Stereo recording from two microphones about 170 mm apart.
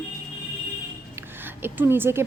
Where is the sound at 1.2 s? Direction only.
10° right (ahead or behind).